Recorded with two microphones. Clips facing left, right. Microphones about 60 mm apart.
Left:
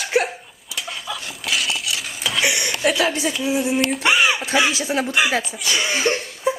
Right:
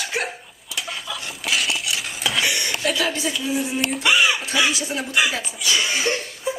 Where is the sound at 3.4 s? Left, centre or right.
Centre.